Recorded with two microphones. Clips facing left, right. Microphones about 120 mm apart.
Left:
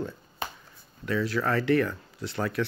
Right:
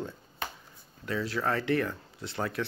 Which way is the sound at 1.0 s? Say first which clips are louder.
Left 3 dB; 30° right (ahead or behind).